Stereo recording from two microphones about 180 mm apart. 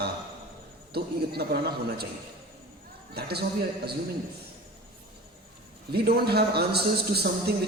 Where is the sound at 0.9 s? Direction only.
60° right (ahead or behind).